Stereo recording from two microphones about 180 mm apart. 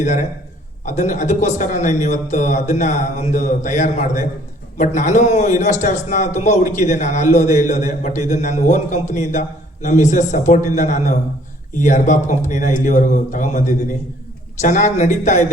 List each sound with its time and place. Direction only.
0.9 s a man's voice: 40° left (ahead or behind)